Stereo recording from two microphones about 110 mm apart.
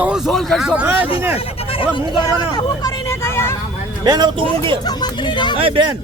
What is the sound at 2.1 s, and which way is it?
Speech, 45° left (ahead or behind).